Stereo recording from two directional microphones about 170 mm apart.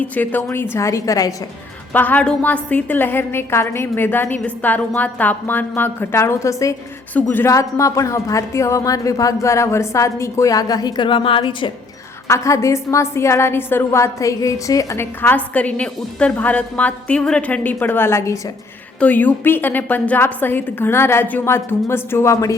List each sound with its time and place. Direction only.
0.0 s a woman's voice: 10° left (ahead or behind); by 11.7 s 30° left (ahead or behind)
12.3 s a woman's voice: 20° left (ahead or behind)